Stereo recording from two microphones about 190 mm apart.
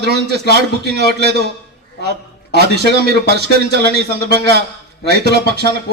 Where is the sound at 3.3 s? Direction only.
60° right (ahead or behind).